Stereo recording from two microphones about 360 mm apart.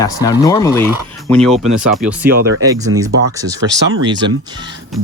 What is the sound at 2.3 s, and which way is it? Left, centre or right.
Speech, right.